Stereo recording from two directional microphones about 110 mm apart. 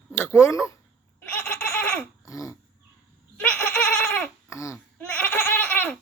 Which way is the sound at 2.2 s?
30° left (ahead or behind).